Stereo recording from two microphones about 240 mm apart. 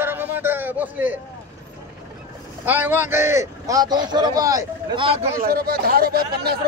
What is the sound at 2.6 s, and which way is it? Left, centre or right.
A man's voice, centre.